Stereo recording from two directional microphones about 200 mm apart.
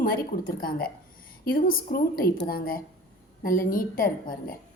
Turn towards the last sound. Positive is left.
turn(degrees=45)  # may be behind; listen again after turning